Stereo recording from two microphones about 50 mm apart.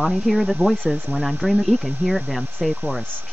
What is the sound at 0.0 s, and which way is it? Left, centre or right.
Speech, centre.